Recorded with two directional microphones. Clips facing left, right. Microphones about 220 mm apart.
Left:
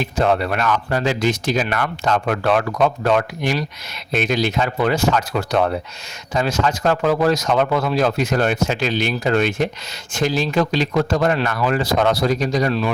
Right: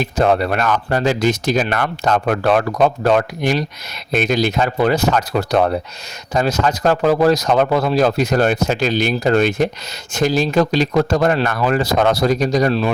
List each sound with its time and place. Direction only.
0.0 s speech: 40° right (ahead or behind)